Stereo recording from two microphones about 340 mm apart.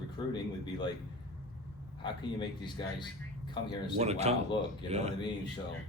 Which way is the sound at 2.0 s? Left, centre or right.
Centre.